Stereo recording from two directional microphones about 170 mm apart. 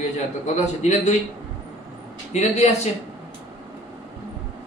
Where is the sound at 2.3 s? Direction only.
40° left (ahead or behind).